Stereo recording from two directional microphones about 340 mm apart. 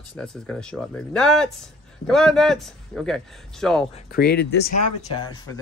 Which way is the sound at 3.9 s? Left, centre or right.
Left.